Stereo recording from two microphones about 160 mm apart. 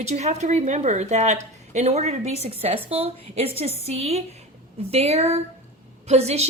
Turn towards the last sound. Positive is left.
turn(degrees=-40)  # may be behind; listen again after turning